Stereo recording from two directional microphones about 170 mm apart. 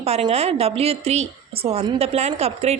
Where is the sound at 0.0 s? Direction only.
35° right (ahead or behind).